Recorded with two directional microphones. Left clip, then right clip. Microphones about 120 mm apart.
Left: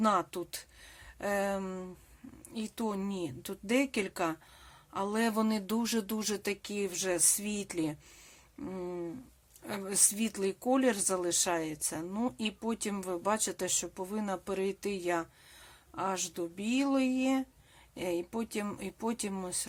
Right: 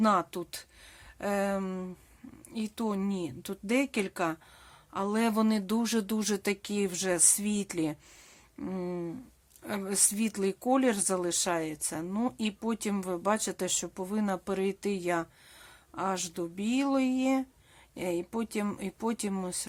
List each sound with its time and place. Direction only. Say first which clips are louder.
0.0 s speech: right 2 dB; 30° right (ahead or behind)